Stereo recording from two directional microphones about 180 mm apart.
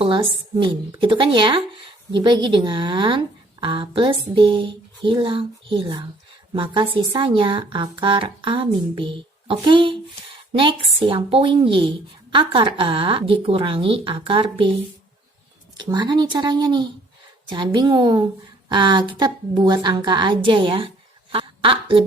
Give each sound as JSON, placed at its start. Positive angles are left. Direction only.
{"t": 0.0, "sound": "speech", "side_deg": -25}
{"t": 15.8, "sound": "a woman's voice", "side_deg": -20}